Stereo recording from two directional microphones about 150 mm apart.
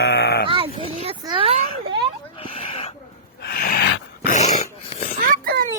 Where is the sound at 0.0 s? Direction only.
90° left.